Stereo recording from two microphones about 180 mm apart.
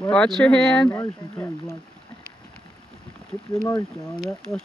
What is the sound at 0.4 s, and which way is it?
Speech, 5° left (ahead or behind).